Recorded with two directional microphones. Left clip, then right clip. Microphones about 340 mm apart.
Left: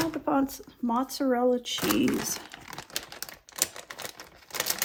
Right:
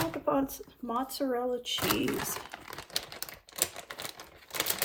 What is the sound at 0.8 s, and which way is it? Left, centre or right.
Speech, left.